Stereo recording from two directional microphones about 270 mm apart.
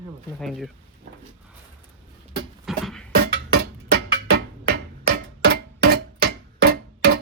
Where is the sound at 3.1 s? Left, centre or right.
Right.